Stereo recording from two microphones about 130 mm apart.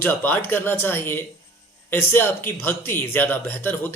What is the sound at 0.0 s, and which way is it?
Speech, 15° left (ahead or behind).